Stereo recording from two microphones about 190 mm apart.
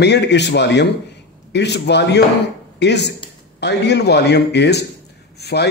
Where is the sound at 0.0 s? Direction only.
65° left (ahead or behind).